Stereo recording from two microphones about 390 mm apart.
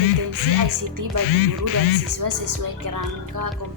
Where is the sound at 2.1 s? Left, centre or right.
Right.